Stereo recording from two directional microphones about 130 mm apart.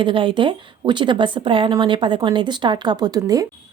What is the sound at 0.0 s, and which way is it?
A woman's voice, 40° right (ahead or behind).